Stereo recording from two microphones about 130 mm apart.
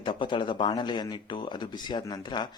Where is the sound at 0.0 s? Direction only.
40° left (ahead or behind).